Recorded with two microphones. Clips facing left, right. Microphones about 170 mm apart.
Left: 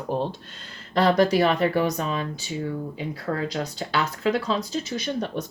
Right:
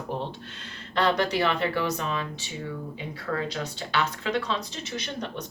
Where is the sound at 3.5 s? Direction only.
40° left (ahead or behind).